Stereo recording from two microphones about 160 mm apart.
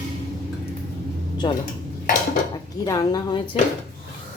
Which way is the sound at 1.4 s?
30° left (ahead or behind).